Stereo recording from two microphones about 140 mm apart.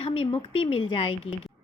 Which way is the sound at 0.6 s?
40° left (ahead or behind).